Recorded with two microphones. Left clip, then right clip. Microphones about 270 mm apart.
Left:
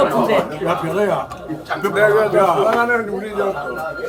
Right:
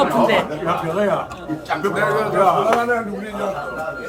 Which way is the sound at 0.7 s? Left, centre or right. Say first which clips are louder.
Left 1 dB; left.